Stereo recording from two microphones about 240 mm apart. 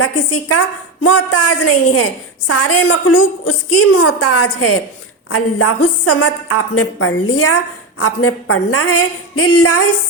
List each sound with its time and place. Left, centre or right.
0.0 s a woman's voice: left